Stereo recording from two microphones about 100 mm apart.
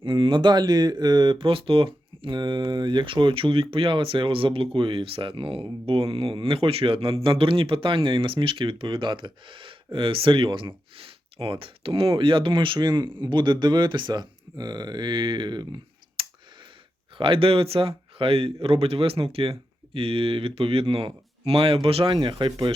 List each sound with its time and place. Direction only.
0.0 s speech: 55° right (ahead or behind)
17.2 s speech: 60° right (ahead or behind)